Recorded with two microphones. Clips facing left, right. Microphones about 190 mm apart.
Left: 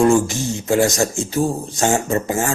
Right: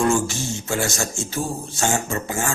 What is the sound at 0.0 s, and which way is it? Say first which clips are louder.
Speech: left 6 dB; 35° left (ahead or behind).